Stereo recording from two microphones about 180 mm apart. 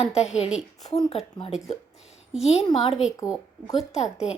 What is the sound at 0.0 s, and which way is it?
A woman's voice, 35° left (ahead or behind).